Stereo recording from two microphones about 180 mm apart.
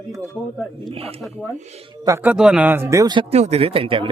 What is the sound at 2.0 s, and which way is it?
Speech, 15° right (ahead or behind).